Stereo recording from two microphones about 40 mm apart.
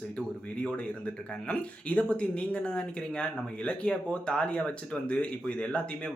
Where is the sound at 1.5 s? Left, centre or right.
Left.